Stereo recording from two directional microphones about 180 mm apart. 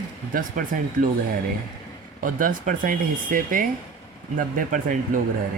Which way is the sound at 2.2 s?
50° right (ahead or behind).